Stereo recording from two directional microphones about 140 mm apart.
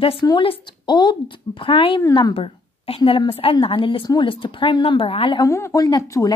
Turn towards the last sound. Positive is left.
turn(degrees=25)  # may be behind; listen again after turning